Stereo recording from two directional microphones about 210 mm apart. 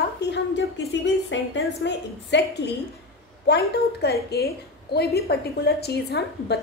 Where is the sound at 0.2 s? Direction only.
55° left (ahead or behind).